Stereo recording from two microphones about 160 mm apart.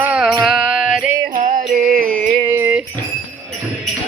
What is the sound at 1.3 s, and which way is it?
Music, 50° right (ahead or behind).